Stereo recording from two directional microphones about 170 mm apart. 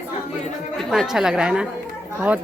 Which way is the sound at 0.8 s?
Centre (ahead or behind).